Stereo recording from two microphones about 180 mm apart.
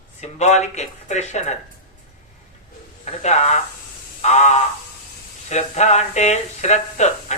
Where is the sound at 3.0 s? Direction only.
40° left (ahead or behind).